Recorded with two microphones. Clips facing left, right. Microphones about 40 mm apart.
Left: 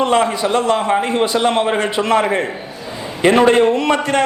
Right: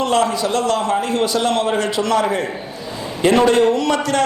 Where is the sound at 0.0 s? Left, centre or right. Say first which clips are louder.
Left 2 dB; left.